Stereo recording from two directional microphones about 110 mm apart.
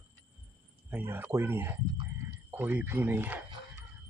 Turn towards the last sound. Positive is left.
turn(degrees=-15)  # may be behind; listen again after turning